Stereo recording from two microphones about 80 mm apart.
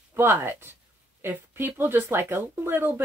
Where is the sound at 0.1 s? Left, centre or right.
Right.